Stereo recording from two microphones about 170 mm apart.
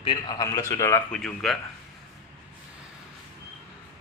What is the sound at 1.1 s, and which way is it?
Speech, centre (ahead or behind).